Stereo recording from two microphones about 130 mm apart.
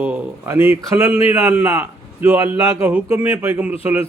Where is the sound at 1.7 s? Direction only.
15° right (ahead or behind).